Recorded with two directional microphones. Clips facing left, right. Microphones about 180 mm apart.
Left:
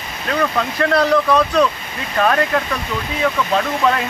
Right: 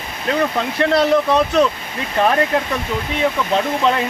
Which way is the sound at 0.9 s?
25° right (ahead or behind).